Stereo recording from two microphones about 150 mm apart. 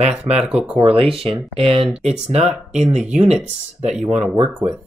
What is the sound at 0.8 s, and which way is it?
Speech, 40° right (ahead or behind).